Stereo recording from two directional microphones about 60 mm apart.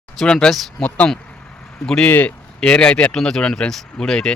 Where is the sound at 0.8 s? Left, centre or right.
Left.